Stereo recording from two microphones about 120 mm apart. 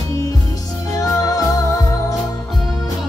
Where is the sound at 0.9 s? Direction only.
30° left (ahead or behind).